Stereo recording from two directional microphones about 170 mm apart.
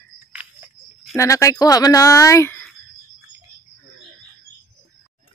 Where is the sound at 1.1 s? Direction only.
20° left (ahead or behind).